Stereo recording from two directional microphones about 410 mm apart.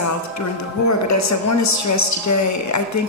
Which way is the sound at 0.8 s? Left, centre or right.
Left.